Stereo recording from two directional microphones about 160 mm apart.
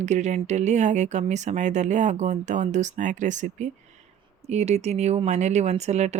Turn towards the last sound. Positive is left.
turn(degrees=-45)  # may be behind; listen again after turning